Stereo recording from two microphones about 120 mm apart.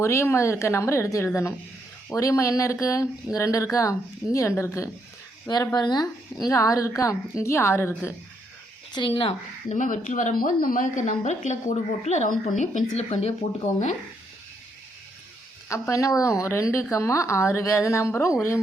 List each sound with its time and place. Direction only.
0.0 s a woman's voice: 20° left (ahead or behind)
5.5 s a woman's voice: 35° left (ahead or behind)
9.0 s speech: 50° left (ahead or behind)
9.7 s a woman's voice: 90° left
13.0 s speech: 60° left (ahead or behind)
15.7 s a woman's voice: 25° left (ahead or behind)